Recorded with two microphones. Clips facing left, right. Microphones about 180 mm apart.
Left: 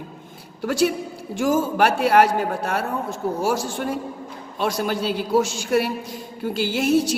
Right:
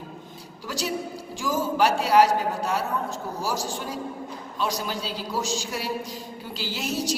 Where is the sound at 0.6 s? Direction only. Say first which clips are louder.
Left 9 dB; 55° left (ahead or behind).